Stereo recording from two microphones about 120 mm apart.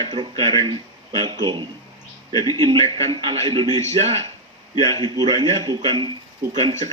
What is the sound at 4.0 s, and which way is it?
Speech, 55° right (ahead or behind).